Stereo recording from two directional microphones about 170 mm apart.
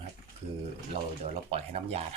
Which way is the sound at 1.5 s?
35° right (ahead or behind).